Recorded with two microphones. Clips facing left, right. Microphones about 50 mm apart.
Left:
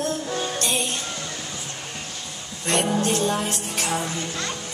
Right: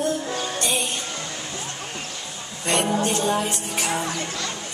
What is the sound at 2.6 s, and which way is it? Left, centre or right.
Music, centre.